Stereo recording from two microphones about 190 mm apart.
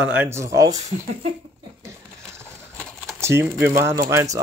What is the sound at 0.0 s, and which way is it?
Speech, 10° right (ahead or behind).